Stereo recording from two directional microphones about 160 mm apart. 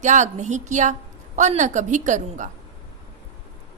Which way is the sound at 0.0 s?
50° right (ahead or behind).